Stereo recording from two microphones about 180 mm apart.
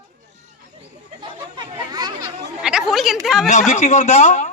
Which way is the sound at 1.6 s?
20° right (ahead or behind).